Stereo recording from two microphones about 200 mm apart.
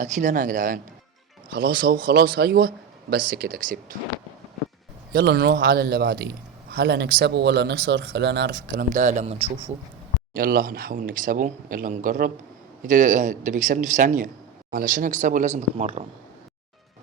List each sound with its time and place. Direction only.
0.0 s speech: 40° right (ahead or behind)
5.1 s speech: 55° right (ahead or behind); by 9.7 s 30° right (ahead or behind)
10.3 s speech: 45° right (ahead or behind)